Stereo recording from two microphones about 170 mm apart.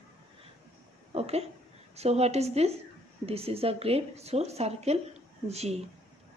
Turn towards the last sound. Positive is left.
turn(degrees=-40)  # may be behind; listen again after turning